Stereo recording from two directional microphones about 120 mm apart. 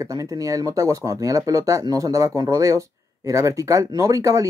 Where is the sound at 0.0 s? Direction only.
30° right (ahead or behind).